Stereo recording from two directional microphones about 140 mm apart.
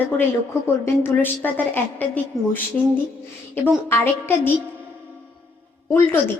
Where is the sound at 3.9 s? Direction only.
15° left (ahead or behind).